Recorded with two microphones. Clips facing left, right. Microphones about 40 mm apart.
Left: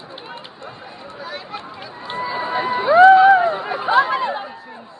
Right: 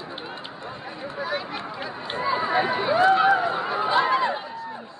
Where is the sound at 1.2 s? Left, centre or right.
Centre.